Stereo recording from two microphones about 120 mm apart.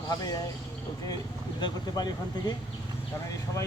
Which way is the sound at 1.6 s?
35° left (ahead or behind).